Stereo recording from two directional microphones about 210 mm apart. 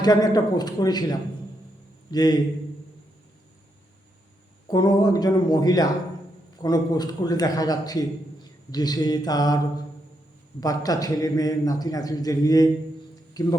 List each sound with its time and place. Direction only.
0.0 s speech: 20° left (ahead or behind)
4.7 s a man's voice: 20° left (ahead or behind)
10.6 s a man's voice: 15° left (ahead or behind)